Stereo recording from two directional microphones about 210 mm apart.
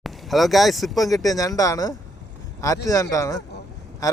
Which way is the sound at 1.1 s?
15° left (ahead or behind).